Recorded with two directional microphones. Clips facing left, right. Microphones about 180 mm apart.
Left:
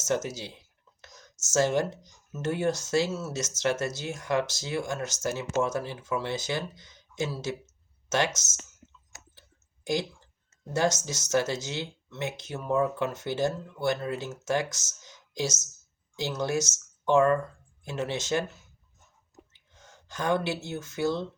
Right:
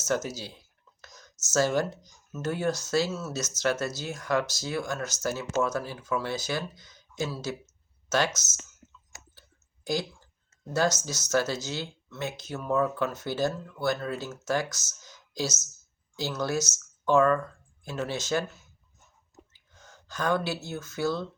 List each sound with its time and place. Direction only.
0.1 s speech: 25° left (ahead or behind)
9.8 s speech: 20° left (ahead or behind)
19.5 s gasp: 25° left (ahead or behind)
20.7 s speech: 25° left (ahead or behind)